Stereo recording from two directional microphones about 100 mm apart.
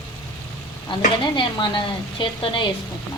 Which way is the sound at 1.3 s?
55° left (ahead or behind).